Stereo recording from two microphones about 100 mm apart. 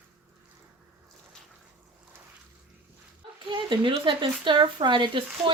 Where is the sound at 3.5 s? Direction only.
55° right (ahead or behind).